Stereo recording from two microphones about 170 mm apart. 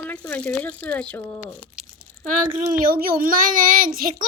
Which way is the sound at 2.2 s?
50° right (ahead or behind).